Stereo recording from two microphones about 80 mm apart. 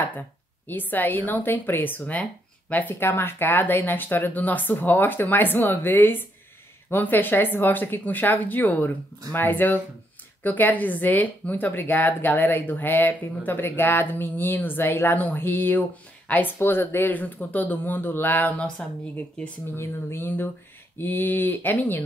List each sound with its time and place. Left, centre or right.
0.7 s a woman's voice: left
19.7 s a woman's voice: left